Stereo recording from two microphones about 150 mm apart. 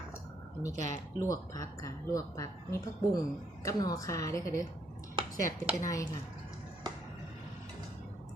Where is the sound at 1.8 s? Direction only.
20° left (ahead or behind).